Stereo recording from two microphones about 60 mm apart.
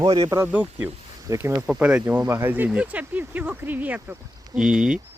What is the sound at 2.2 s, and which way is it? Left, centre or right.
Speech, right.